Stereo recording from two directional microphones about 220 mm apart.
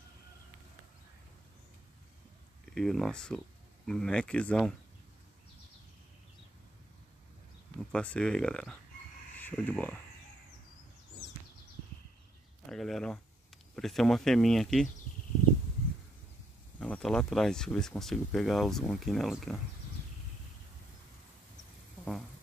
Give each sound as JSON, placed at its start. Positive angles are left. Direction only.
{"t": 2.6, "sound": "speech", "side_deg": 0}
{"t": 7.9, "sound": "speech", "side_deg": 5}
{"t": 12.6, "sound": "speech", "side_deg": 0}
{"t": 16.8, "sound": "speech", "side_deg": 5}